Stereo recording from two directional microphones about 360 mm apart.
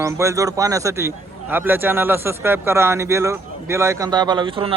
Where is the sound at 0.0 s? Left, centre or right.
Centre.